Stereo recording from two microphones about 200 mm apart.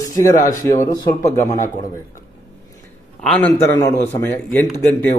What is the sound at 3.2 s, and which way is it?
A man's voice, 5° left (ahead or behind).